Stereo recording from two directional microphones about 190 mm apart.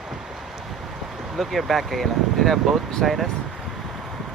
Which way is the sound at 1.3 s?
Centre (ahead or behind).